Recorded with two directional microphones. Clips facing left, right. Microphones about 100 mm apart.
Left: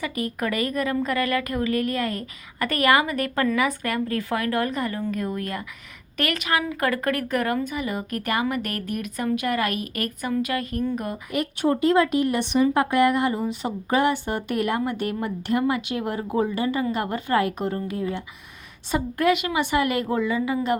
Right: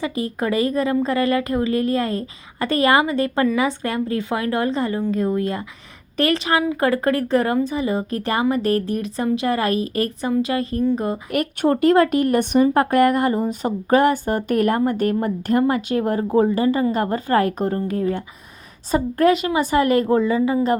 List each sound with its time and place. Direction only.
0.0 s speech: 25° right (ahead or behind)
11.3 s speech: 55° right (ahead or behind); by 20.7 s 35° right (ahead or behind)